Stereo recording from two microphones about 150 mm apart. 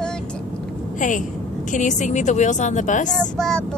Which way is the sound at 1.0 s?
55° left (ahead or behind).